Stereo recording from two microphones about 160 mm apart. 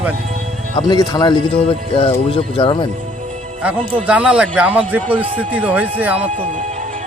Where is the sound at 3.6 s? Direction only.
10° right (ahead or behind).